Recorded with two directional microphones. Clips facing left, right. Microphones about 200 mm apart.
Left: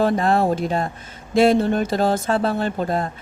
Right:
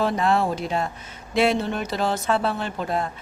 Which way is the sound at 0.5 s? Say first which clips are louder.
Left 4 dB; 45° left (ahead or behind).